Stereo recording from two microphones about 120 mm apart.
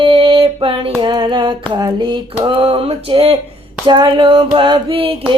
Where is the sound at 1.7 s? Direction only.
35° right (ahead or behind).